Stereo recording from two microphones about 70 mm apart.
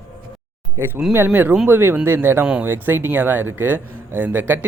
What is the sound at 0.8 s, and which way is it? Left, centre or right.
Speech, right.